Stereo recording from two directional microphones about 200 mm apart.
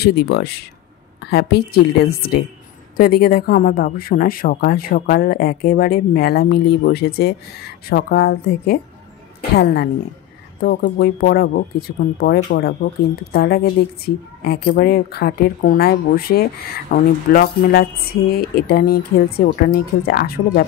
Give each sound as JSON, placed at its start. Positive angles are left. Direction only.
{"t": 0.0, "sound": "a woman's voice", "side_deg": 55}
{"t": 10.6, "sound": "a woman's voice", "side_deg": 55}